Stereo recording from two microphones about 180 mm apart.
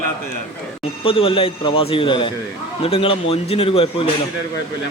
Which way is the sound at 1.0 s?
30° left (ahead or behind).